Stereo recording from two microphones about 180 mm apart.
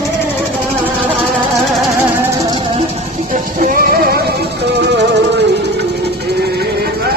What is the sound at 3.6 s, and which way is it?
Music, 55° right (ahead or behind).